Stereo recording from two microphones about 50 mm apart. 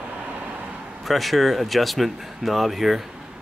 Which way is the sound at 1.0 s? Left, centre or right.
Centre.